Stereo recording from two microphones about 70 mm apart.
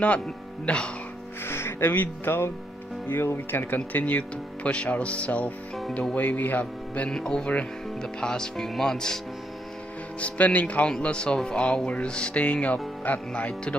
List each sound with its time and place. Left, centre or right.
1.4 s speech: left; by 9.2 s centre
10.2 s speech: left